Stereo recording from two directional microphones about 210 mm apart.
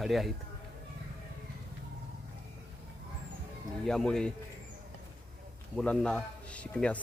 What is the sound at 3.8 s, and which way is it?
Speech, 5° left (ahead or behind).